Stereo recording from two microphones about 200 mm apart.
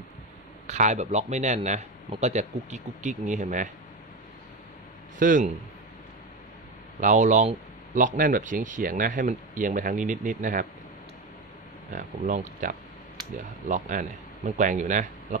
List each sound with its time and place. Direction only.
0.7 s speech: 35° right (ahead or behind)
5.2 s speech: 40° right (ahead or behind)
7.0 s speech: 40° right (ahead or behind)
11.9 s speech: 40° right (ahead or behind)